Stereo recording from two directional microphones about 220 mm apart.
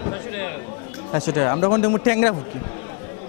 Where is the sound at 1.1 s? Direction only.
20° left (ahead or behind).